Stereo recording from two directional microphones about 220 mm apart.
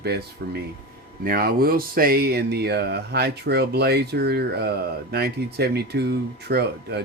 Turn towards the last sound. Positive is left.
turn(degrees=-50)  # may be behind; listen again after turning